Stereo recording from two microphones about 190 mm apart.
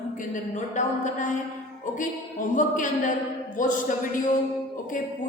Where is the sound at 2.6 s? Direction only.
45° left (ahead or behind).